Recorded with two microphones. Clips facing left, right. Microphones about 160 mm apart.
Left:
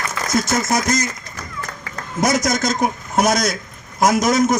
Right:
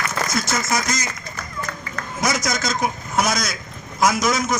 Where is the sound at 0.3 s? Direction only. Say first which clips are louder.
Left 7 dB; 50° left (ahead or behind).